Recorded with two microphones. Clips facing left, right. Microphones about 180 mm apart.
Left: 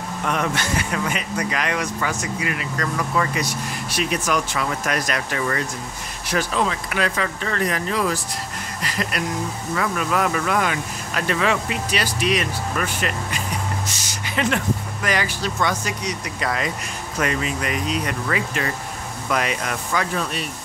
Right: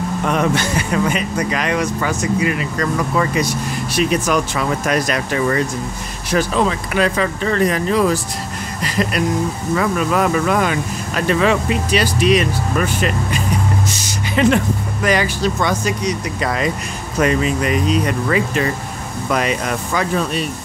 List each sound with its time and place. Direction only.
0.3 s speech: 25° right (ahead or behind)